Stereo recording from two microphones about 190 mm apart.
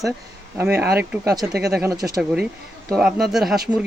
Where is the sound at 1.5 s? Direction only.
55° right (ahead or behind).